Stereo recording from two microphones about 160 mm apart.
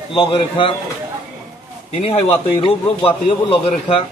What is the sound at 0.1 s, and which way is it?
Speech, 30° left (ahead or behind).